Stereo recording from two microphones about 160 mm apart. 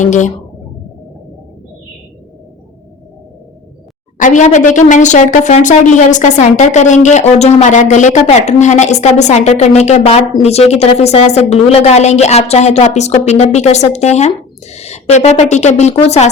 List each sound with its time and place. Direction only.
0.0 s a woman's voice: 50° left (ahead or behind)
4.2 s a woman's voice: 50° left (ahead or behind)